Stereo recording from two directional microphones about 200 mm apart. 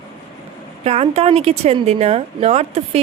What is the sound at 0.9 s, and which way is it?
A woman's voice, 30° right (ahead or behind).